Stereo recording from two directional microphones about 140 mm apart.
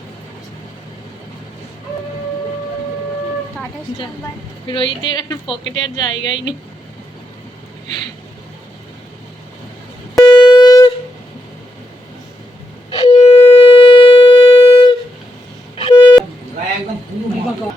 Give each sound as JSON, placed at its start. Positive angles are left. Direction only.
{"t": 4.7, "sound": "a woman's voice", "side_deg": 35}
{"t": 10.3, "sound": "wind instrument", "side_deg": 30}
{"t": 13.1, "sound": "shofar", "side_deg": 50}
{"t": 15.7, "sound": "busy signal", "side_deg": 40}